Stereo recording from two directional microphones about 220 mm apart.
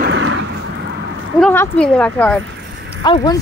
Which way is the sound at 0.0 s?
60° right (ahead or behind).